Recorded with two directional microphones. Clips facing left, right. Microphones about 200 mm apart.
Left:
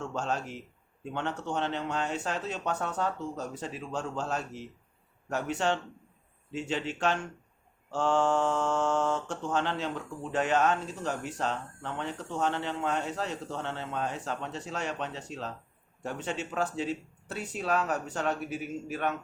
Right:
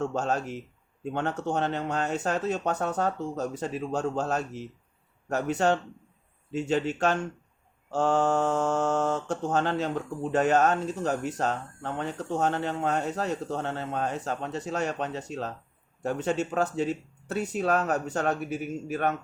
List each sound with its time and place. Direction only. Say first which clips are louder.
0.0 s mantra: right 5 dB; 40° right (ahead or behind)
1.1 s speech: right 4 dB; 45° right (ahead or behind)
5.3 s mantra: right 5 dB; 40° right (ahead or behind)
6.5 s speech: right 6 dB; 45° right (ahead or behind)
7.9 s mantra: right 2 dB; 40° right (ahead or behind)
10.3 s speech: right 4 dB; 40° right (ahead or behind)